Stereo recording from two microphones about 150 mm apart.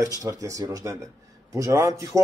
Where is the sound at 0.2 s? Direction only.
20° right (ahead or behind).